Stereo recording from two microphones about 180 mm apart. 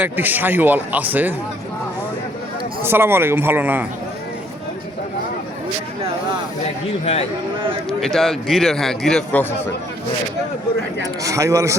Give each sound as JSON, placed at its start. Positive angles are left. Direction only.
{"t": 0.0, "sound": "speech", "side_deg": -10}
{"t": 2.8, "sound": "speech", "side_deg": -15}
{"t": 7.0, "sound": "speech", "side_deg": 35}
{"t": 7.9, "sound": "a man's voice", "side_deg": 0}
{"t": 11.0, "sound": "speech", "side_deg": -20}